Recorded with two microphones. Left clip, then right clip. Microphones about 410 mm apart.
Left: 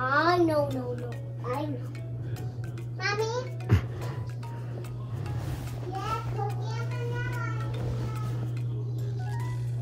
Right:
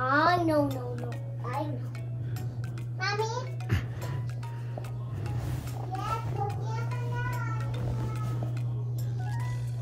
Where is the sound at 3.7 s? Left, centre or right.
Centre.